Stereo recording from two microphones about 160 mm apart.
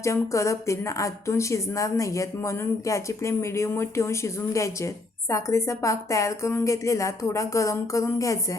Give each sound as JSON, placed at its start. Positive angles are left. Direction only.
{"t": 0.0, "sound": "a woman's voice", "side_deg": 20}